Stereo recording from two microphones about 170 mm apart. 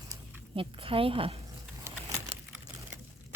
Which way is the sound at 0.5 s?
30° right (ahead or behind).